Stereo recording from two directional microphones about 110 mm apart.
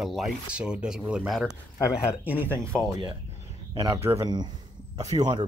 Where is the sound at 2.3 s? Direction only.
15° left (ahead or behind).